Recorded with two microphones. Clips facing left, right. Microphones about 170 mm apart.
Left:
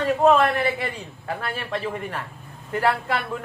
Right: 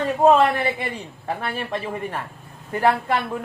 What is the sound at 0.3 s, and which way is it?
Speech, 15° right (ahead or behind).